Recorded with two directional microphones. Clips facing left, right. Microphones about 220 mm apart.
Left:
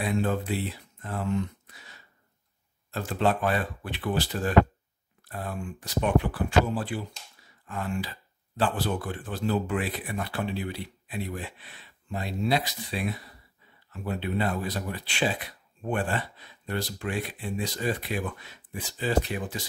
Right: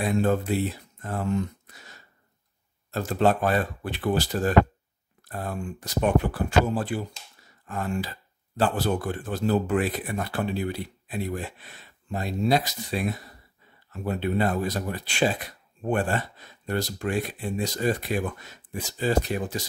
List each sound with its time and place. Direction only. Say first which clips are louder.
0.0 s speech: right 4 dB; 45° right (ahead or behind)